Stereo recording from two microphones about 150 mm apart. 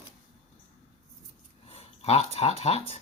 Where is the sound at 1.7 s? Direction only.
45° left (ahead or behind).